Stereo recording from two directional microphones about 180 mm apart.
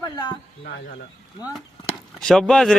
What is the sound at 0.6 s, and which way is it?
Speech, 65° left (ahead or behind).